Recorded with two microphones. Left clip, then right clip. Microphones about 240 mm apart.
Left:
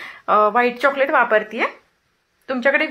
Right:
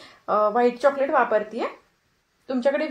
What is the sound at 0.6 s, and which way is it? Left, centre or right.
Speech, left.